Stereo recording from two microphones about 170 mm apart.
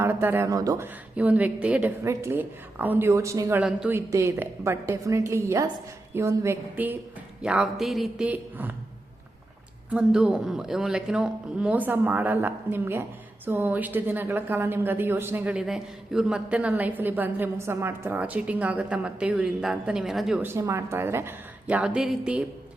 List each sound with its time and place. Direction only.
0.0 s speech: 15° right (ahead or behind)
1.1 s speech: 10° right (ahead or behind)
3.6 s a man's voice: 5° right (ahead or behind)
3.9 s a man's voice: 15° right (ahead or behind)
9.9 s speech: 5° right (ahead or behind)